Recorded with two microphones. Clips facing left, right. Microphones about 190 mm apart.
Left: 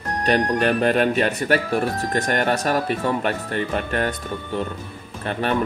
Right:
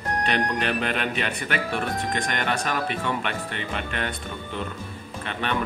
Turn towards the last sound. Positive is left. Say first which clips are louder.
# left 5 dB
turn(degrees=40)  # may be behind; listen again after turning